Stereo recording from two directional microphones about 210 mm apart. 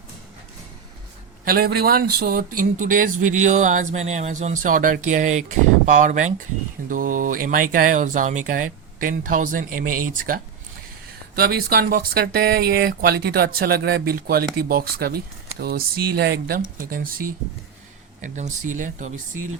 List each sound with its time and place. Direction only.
1.5 s speech: 50° right (ahead or behind)
11.3 s speech: 45° right (ahead or behind)